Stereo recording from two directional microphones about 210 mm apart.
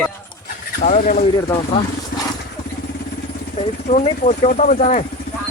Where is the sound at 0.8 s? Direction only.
35° left (ahead or behind).